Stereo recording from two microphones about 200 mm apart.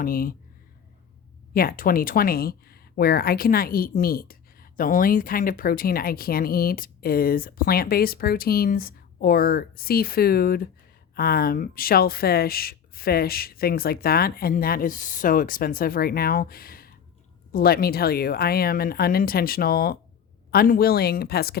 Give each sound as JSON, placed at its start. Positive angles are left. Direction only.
{"t": 0.0, "sound": "speech", "side_deg": 45}
{"t": 1.5, "sound": "speech", "side_deg": 45}